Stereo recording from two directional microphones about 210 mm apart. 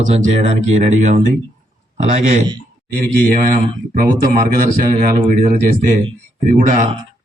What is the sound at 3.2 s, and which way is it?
A man's voice, 40° right (ahead or behind).